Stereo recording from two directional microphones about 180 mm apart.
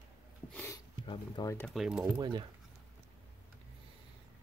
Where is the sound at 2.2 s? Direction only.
25° right (ahead or behind).